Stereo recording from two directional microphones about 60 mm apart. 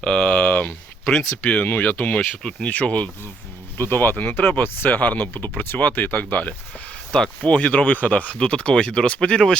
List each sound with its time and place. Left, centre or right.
0.0 s a sound: centre
1.6 s speech: left
2.4 s speech: centre
2.6 s speech: left
3.8 s speech: left; by 9.4 s centre